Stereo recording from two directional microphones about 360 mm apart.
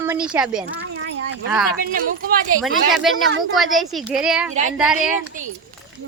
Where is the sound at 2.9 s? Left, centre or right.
Centre.